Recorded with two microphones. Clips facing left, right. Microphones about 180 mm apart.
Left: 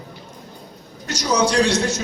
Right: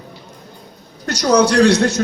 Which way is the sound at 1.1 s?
65° right (ahead or behind).